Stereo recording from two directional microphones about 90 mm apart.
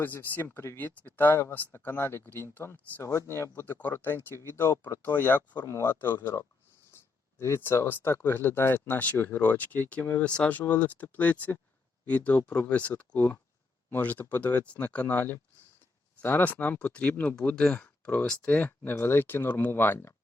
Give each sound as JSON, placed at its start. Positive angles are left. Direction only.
{"t": 0.0, "sound": "speech", "side_deg": 20}
{"t": 3.0, "sound": "speech", "side_deg": 30}
{"t": 18.9, "sound": "speech", "side_deg": 25}